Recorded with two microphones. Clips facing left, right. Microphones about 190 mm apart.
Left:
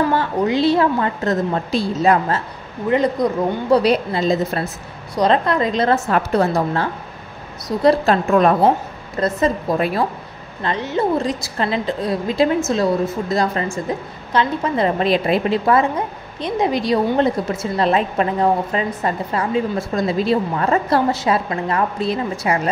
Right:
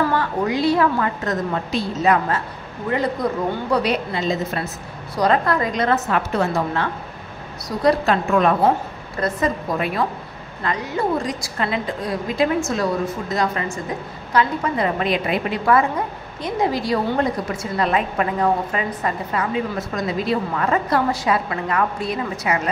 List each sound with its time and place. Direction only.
0.0 s a woman's voice: 25° left (ahead or behind)
2.9 s a woman's voice: 20° left (ahead or behind)
3.7 s a woman's voice: 35° left (ahead or behind)
5.2 s a woman's voice: 20° left (ahead or behind)